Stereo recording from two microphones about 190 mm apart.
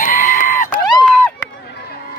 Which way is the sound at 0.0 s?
45° left (ahead or behind).